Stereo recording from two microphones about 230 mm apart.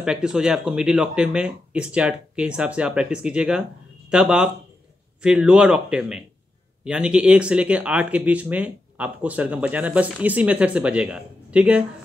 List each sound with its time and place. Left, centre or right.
0.0 s speech: centre